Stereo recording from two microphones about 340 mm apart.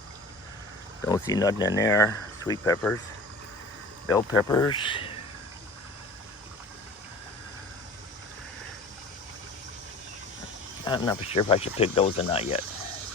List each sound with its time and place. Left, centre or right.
1.0 s speech: centre
4.1 s speech: centre
10.8 s speech: centre